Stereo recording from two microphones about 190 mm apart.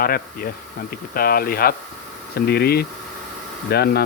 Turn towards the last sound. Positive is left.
turn(degrees=55)  # may be behind; listen again after turning